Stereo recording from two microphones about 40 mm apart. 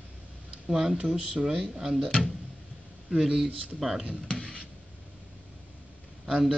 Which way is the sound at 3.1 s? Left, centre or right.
Centre.